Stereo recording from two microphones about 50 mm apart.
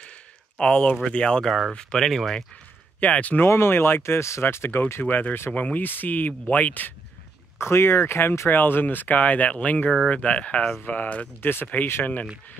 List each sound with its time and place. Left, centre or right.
0.0 s a sound: left
1.0 s speech: left
3.0 s speech: left
3.4 s speech: left
5.0 s speech: left
7.5 s speech: left